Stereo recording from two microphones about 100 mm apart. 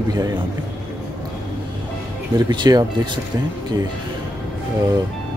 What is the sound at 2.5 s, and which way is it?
Speech, 45° right (ahead or behind).